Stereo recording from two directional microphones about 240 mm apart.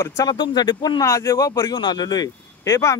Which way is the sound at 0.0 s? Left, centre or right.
Centre.